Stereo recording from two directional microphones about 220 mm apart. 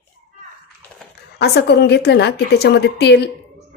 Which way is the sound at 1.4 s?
50° left (ahead or behind).